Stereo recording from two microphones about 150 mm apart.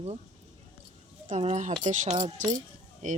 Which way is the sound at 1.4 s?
45° right (ahead or behind).